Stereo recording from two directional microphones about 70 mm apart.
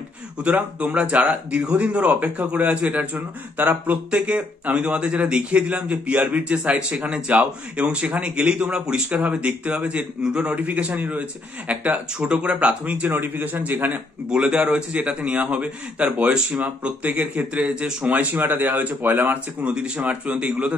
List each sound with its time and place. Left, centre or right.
0.4 s a man's voice: centre
13.1 s speech: right
14.3 s a man's voice: centre; by 19.3 s right
19.6 s a man's voice: centre